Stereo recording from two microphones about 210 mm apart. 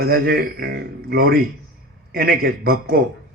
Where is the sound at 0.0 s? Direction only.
50° right (ahead or behind).